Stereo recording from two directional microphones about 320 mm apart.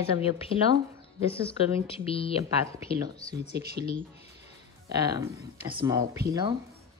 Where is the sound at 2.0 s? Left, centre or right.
Centre.